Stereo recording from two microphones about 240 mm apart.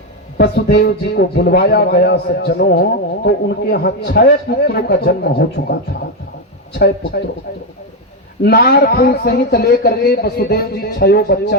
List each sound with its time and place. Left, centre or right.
0.3 s a man's voice: left
6.7 s a man's voice: left
8.4 s a man's voice: left